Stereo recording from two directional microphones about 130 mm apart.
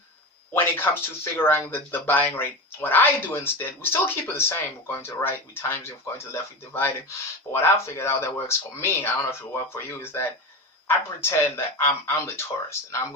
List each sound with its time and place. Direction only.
0.5 s speech: 15° left (ahead or behind)